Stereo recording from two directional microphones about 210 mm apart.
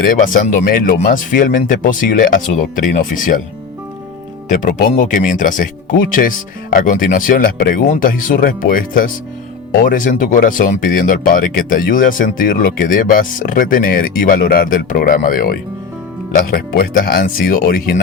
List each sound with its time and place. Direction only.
0.0 s speech: 40° left (ahead or behind)
4.4 s speech: 40° left (ahead or behind)